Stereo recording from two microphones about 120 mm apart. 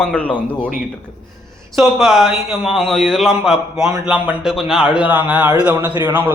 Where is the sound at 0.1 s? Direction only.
15° left (ahead or behind).